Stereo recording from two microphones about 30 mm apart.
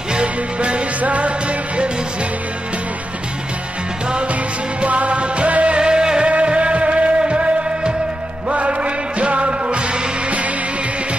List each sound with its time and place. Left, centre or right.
0.1 s music: right
1.0 s music: right
4.8 s music: right
5.8 s music: right
6.2 s music: right